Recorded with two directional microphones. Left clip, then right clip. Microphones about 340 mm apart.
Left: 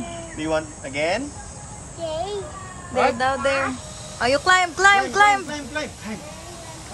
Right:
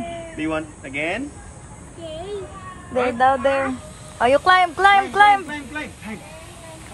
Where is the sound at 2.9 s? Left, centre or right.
Centre.